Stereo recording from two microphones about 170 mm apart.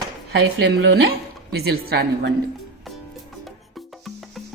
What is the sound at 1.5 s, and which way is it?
Speech, 70° right (ahead or behind).